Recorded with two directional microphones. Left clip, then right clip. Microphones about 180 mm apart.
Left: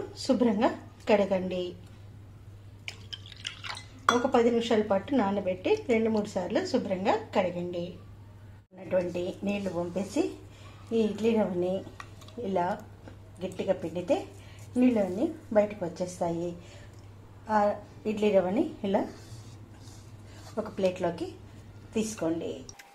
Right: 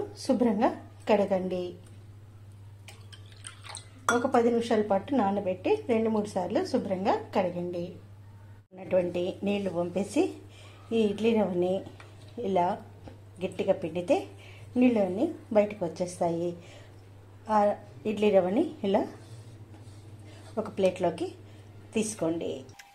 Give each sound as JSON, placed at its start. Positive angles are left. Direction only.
{"t": 0.3, "sound": "a woman's voice", "side_deg": 0}
{"t": 4.2, "sound": "a woman's voice", "side_deg": 0}
{"t": 8.8, "sound": "a woman's voice", "side_deg": -15}
{"t": 17.5, "sound": "a woman's voice", "side_deg": -20}
{"t": 20.5, "sound": "a woman's voice", "side_deg": -15}